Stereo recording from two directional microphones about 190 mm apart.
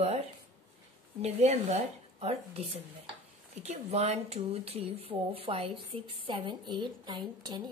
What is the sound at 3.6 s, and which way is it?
Speech, 35° right (ahead or behind).